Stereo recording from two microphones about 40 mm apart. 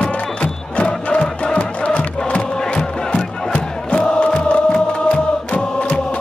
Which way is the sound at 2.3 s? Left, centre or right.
Left.